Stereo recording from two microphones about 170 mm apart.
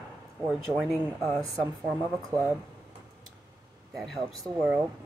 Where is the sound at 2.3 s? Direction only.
25° right (ahead or behind).